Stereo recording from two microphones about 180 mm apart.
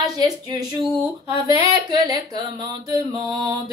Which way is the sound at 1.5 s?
20° right (ahead or behind).